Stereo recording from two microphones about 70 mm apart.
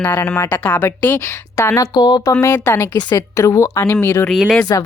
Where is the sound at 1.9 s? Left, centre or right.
Left.